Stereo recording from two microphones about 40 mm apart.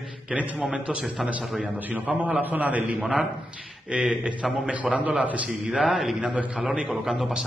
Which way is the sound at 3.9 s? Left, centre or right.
Right.